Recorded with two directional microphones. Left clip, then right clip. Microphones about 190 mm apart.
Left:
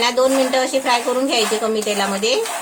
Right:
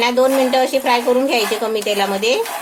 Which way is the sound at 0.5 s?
50° right (ahead or behind).